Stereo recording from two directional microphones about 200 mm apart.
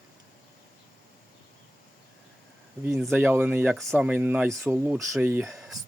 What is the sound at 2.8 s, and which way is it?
Speech, centre (ahead or behind).